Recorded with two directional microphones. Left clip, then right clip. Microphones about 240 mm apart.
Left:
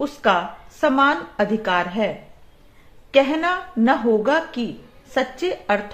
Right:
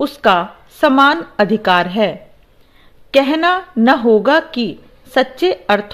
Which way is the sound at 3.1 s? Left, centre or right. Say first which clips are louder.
Right 5 dB; right.